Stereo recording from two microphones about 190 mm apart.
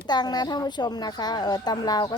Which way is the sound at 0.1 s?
20° left (ahead or behind).